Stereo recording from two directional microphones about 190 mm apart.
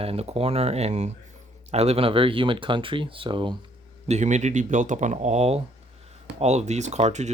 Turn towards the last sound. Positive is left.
turn(degrees=-35)  # may be behind; listen again after turning